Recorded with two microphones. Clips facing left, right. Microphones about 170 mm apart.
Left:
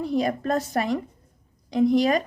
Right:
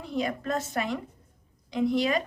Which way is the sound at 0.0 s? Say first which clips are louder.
Left 6 dB; 40° left (ahead or behind).